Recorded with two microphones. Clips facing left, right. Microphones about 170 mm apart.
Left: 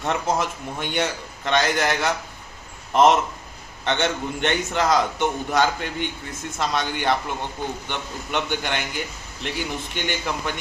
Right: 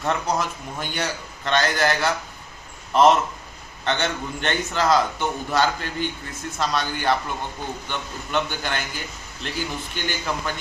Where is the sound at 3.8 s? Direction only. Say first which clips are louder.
Left 2 dB; 20° left (ahead or behind).